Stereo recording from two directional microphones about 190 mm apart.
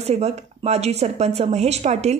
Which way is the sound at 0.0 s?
35° right (ahead or behind).